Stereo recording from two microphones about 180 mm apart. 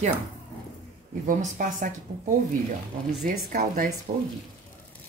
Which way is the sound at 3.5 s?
50° right (ahead or behind).